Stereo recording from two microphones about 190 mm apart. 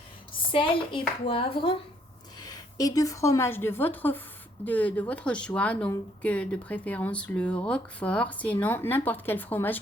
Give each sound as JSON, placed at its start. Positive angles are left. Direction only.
{"t": 0.5, "sound": "a woman's voice", "side_deg": 25}